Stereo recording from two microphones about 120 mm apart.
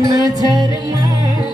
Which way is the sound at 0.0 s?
30° right (ahead or behind).